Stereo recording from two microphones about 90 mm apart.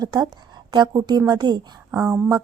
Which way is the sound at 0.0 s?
45° right (ahead or behind).